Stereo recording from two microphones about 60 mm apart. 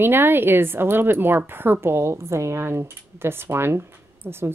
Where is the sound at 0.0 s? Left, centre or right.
Right.